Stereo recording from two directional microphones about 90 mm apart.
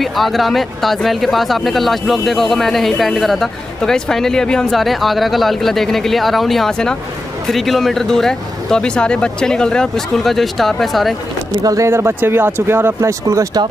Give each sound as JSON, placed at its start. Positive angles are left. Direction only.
{"t": 0.0, "sound": "speech", "side_deg": 0}
{"t": 11.6, "sound": "speech", "side_deg": -35}